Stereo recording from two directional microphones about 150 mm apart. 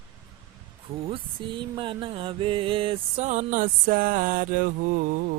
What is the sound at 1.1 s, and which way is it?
Mantra, 35° right (ahead or behind).